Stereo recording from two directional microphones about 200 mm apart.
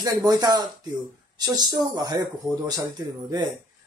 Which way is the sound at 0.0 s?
20° right (ahead or behind).